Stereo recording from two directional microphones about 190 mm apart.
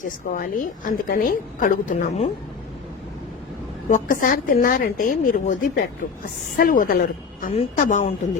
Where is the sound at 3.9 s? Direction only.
45° left (ahead or behind).